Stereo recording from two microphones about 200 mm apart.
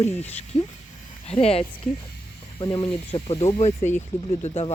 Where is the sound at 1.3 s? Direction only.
30° left (ahead or behind).